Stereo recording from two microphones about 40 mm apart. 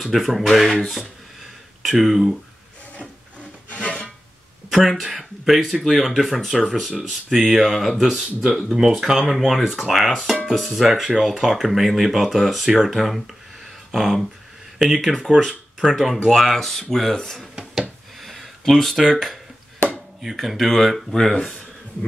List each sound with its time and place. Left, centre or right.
0.1 s speech: centre
3.7 s filing: left
4.6 s speech: centre
16.3 s speech: centre
17.7 s a sound: centre
20.3 s speech: centre